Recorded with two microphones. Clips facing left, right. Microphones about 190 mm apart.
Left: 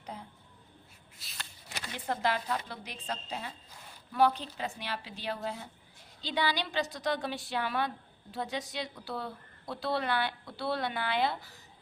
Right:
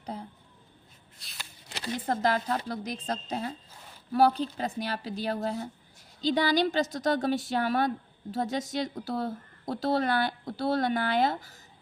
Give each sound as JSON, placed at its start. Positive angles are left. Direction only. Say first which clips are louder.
{"t": 0.0, "sound": "a sound", "louder": "right 6 dB", "side_deg": -35}
{"t": 1.2, "sound": "shuffle", "louder": "even", "side_deg": 0}
{"t": 1.8, "sound": "a woman's voice", "louder": "right 5 dB", "side_deg": -40}